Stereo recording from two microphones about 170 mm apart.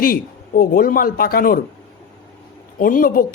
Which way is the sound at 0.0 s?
60° left (ahead or behind).